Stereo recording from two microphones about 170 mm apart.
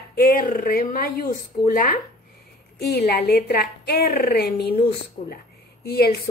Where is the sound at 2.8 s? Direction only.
75° left (ahead or behind).